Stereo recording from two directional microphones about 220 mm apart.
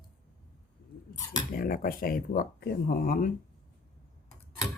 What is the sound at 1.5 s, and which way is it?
Speech, 40° left (ahead or behind).